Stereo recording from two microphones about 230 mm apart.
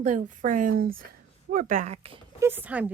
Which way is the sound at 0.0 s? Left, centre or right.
Right.